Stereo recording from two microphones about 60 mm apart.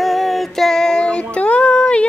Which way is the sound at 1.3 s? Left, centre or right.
Left.